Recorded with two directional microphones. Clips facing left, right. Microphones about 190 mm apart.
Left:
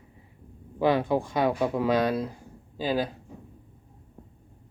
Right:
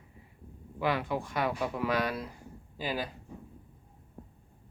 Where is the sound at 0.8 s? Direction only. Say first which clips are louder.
Left 7 dB; 25° left (ahead or behind).